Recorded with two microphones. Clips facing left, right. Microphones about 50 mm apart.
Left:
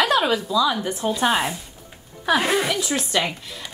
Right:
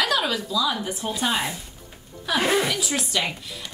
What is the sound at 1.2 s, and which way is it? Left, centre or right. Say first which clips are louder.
Speech: left 4 dB; centre.